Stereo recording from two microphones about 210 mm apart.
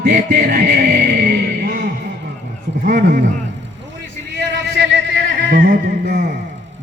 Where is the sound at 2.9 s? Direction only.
40° right (ahead or behind).